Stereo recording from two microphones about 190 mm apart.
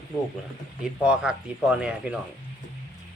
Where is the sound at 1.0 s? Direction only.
5° right (ahead or behind).